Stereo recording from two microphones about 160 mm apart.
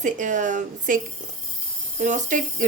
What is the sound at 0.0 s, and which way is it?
Speech, 50° right (ahead or behind).